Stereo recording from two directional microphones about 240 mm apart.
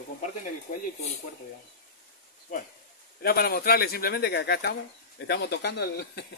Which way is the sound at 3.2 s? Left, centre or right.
Left.